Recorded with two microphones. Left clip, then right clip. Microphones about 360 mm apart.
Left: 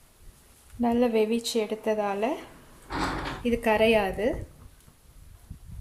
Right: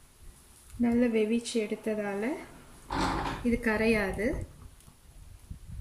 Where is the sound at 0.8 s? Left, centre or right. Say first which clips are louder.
Left 4 dB; left.